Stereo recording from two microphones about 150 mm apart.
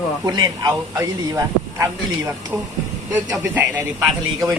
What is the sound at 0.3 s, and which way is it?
A man's voice, 30° right (ahead or behind).